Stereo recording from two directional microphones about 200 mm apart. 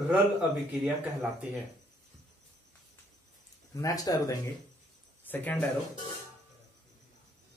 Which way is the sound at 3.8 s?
15° left (ahead or behind).